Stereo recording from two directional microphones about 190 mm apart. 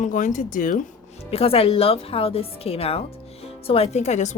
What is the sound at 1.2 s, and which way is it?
A woman's voice, 30° left (ahead or behind).